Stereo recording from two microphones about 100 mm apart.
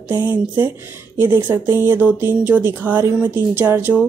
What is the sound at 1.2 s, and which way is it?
Speech, 20° right (ahead or behind).